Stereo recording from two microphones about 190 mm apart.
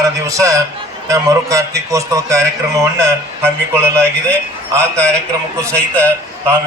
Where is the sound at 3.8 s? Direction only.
5° left (ahead or behind).